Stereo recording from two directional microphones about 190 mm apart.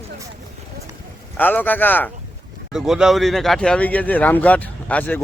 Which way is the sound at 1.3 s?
10° left (ahead or behind).